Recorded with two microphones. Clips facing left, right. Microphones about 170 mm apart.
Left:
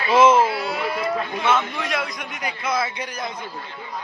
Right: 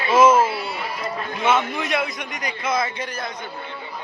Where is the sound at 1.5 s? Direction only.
5° right (ahead or behind); by 3.2 s 10° left (ahead or behind).